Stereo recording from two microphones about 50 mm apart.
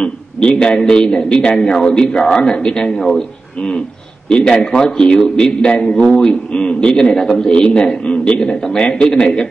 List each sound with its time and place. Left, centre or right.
0.0 s a man's voice: centre